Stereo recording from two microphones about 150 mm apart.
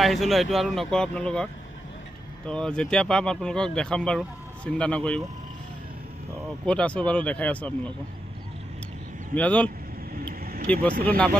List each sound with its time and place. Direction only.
0.0 s speech: centre (ahead or behind)
6.6 s speech: 5° left (ahead or behind)
9.3 s speech: 10° left (ahead or behind)
10.2 s vehicle: 90° right
10.7 s speech: 10° left (ahead or behind)